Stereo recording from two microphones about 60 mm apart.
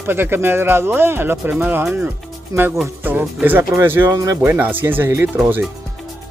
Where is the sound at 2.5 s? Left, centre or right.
Right.